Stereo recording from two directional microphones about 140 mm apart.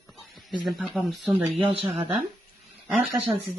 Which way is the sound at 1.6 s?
45° right (ahead or behind).